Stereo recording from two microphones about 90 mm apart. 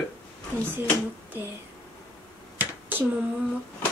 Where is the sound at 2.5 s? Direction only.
20° right (ahead or behind).